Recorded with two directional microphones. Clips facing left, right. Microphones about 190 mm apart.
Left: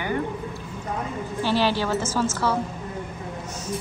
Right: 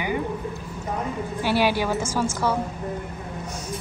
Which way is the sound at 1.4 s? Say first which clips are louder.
Right 1 dB; 10° right (ahead or behind).